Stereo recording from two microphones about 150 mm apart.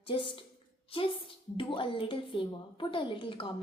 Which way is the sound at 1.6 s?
35° left (ahead or behind).